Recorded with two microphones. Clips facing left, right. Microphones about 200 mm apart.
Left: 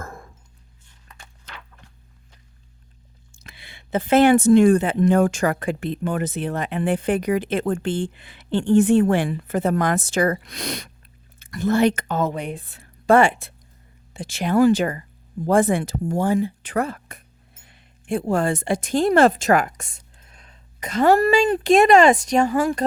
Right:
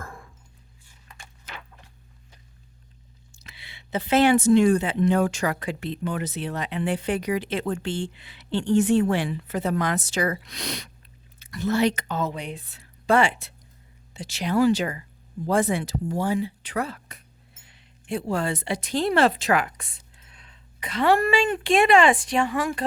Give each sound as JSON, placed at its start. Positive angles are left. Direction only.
{"t": 0.0, "sound": "dog", "side_deg": 45}
{"t": 0.9, "sound": "a sound", "side_deg": -10}
{"t": 3.3, "sound": "a woman's voice", "side_deg": 50}